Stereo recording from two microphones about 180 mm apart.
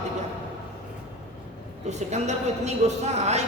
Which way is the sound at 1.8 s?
40° right (ahead or behind).